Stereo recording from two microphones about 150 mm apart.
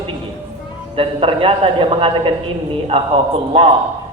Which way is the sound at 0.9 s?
40° right (ahead or behind).